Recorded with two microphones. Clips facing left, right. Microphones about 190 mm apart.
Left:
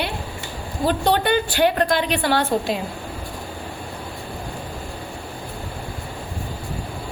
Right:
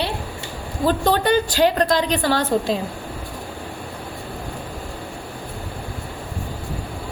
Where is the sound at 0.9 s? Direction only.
40° right (ahead or behind).